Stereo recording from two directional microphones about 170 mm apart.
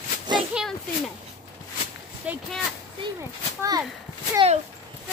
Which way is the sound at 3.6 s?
20° right (ahead or behind).